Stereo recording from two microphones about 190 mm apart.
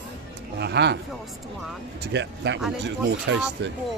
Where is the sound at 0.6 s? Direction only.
60° right (ahead or behind).